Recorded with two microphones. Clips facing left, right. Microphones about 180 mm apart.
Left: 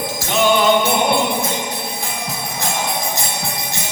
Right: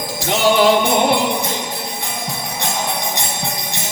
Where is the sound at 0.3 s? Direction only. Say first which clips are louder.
Right 2 dB; 90° right.